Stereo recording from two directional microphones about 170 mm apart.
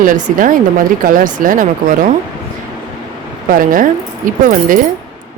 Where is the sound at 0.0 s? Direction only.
55° right (ahead or behind).